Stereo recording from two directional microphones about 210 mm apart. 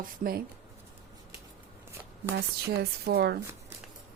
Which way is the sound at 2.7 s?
50° right (ahead or behind).